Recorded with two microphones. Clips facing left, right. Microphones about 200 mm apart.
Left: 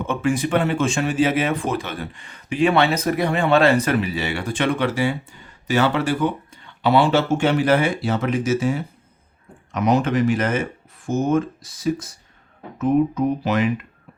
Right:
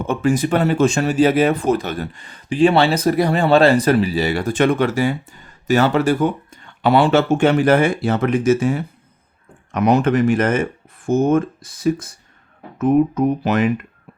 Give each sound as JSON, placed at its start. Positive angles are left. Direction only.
{"t": 0.0, "sound": "speech", "side_deg": -40}